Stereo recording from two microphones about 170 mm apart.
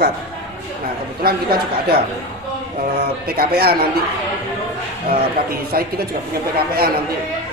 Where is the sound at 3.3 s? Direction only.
65° right (ahead or behind).